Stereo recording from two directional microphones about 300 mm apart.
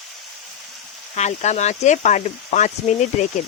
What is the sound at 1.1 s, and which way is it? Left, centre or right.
Speech, left.